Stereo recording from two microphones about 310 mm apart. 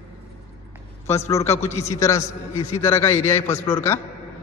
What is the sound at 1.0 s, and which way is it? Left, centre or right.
A man's voice, centre.